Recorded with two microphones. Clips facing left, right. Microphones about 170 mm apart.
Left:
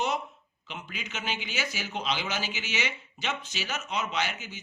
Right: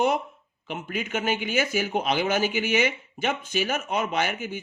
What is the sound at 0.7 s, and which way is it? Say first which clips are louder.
Speech: right 10 dB; 50° right (ahead or behind).